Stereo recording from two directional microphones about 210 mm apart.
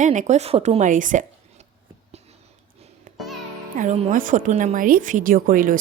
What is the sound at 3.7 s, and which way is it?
Speech, 30° right (ahead or behind).